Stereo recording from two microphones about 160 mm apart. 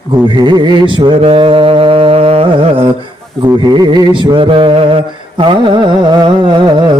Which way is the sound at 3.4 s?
25° right (ahead or behind).